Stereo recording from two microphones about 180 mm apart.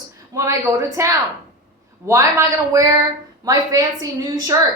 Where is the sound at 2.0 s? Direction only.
15° right (ahead or behind).